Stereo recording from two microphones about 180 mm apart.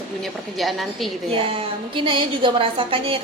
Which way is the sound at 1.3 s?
30° right (ahead or behind).